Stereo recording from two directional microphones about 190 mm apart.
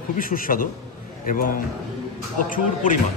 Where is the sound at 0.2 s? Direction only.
45° left (ahead or behind).